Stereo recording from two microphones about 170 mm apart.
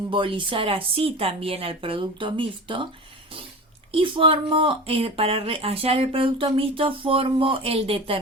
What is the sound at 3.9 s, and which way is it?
Speech, 30° right (ahead or behind).